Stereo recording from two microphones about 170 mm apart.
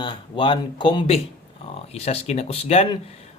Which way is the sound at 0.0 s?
25° left (ahead or behind).